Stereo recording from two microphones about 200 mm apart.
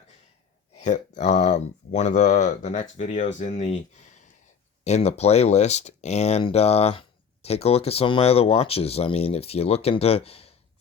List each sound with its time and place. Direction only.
0.8 s speech: 35° left (ahead or behind)